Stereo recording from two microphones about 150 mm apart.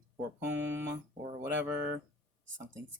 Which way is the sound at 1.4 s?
10° right (ahead or behind).